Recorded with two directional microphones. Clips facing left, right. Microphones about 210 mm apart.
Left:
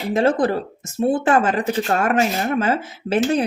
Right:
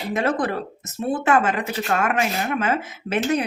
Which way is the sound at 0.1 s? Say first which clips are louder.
Left 5 dB; 30° left (ahead or behind).